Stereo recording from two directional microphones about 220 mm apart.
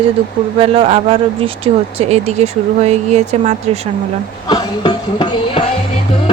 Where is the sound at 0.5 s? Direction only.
25° right (ahead or behind).